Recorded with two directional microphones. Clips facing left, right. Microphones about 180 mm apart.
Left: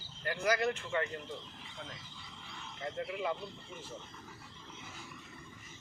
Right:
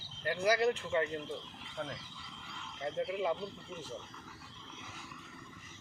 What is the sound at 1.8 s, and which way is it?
Speech, 50° right (ahead or behind).